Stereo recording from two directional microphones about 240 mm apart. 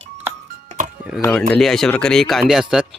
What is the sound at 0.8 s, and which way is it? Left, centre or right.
Music, right.